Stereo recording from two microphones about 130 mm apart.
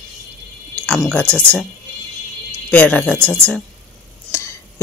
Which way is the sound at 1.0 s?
5° left (ahead or behind).